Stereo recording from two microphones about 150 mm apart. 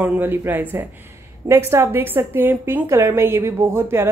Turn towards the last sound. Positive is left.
turn(degrees=-15)  # may be behind; listen again after turning